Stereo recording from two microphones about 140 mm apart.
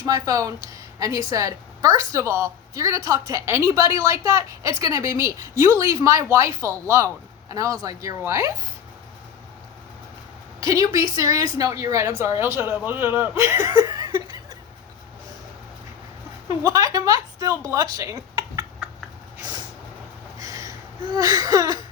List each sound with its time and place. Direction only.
0.0 s a woman's voice: 25° right (ahead or behind)
10.6 s a woman's voice: 25° right (ahead or behind)
16.6 s speech: 25° right (ahead or behind)
19.4 s vehicle: 30° right (ahead or behind)
20.4 s a sound: 25° right (ahead or behind)